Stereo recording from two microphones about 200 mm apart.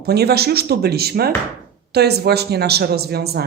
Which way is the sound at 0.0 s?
55° right (ahead or behind).